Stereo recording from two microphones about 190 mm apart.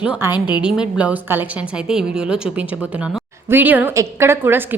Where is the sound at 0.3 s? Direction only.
20° left (ahead or behind).